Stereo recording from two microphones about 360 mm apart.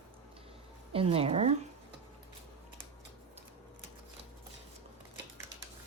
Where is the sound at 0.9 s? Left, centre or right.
Centre.